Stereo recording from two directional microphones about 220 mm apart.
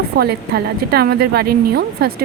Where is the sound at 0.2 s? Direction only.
45° right (ahead or behind).